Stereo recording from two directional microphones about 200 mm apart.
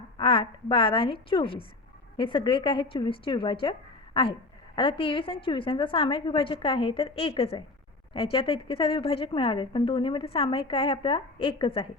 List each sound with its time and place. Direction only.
0.2 s speech: 25° left (ahead or behind)